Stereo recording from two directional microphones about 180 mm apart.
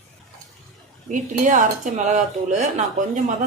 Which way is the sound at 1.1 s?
45° right (ahead or behind).